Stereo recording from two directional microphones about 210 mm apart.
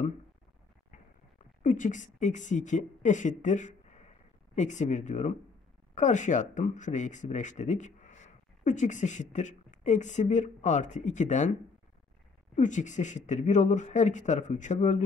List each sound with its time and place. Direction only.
1.6 s a woman's voice: 35° left (ahead or behind)
12.5 s speech: 35° left (ahead or behind)